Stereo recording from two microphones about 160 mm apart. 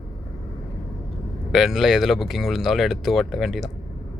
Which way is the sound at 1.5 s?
Centre (ahead or behind).